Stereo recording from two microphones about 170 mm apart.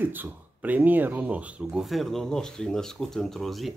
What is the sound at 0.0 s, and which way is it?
Speech, 10° right (ahead or behind).